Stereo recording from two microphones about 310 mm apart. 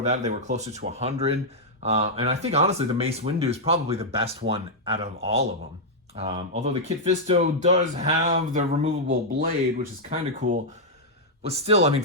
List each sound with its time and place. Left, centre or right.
0.0 s speech: right
11.4 s speech: centre